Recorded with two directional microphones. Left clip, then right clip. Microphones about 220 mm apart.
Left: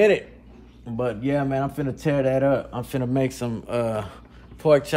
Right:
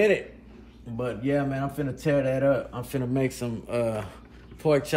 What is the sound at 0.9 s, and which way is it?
Speech, 20° left (ahead or behind).